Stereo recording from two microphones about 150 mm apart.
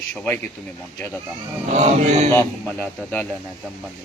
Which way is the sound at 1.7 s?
50° right (ahead or behind).